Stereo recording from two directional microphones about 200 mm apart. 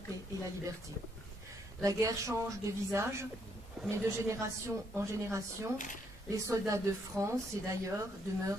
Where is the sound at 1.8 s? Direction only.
15° right (ahead or behind).